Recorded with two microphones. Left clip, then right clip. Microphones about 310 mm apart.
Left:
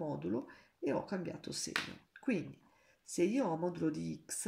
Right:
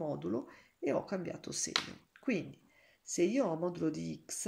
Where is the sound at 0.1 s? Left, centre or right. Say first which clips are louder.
Right 2 dB; centre.